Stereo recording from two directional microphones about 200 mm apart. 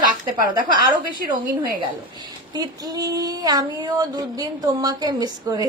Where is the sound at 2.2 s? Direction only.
20° right (ahead or behind).